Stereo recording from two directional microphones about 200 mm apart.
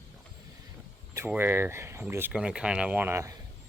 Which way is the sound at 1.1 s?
10° right (ahead or behind).